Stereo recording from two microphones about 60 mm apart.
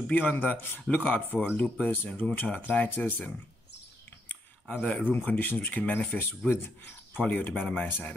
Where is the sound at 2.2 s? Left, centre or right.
Centre.